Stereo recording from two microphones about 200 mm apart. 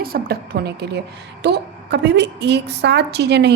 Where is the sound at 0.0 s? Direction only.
50° right (ahead or behind).